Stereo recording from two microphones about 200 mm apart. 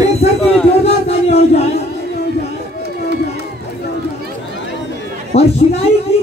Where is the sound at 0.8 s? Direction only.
30° left (ahead or behind).